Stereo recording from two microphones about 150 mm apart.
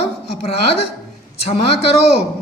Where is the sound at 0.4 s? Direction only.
45° left (ahead or behind).